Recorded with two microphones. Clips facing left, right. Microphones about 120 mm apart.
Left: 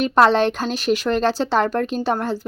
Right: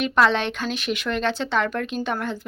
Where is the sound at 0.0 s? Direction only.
40° left (ahead or behind).